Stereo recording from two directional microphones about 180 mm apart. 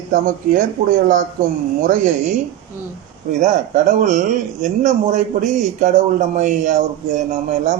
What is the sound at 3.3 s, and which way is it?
A man's voice, 45° right (ahead or behind).